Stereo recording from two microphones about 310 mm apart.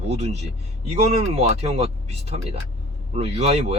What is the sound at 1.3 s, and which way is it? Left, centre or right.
Speech, centre.